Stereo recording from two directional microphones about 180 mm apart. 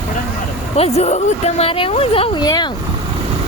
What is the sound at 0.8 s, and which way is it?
Speech, 35° left (ahead or behind).